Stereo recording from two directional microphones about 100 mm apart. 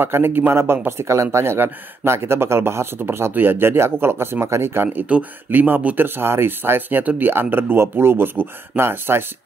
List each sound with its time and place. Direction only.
0.0 s speech: 20° right (ahead or behind)
4.8 s speech: 10° right (ahead or behind)